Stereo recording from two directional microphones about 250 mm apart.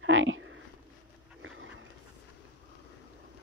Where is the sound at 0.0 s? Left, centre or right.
Right.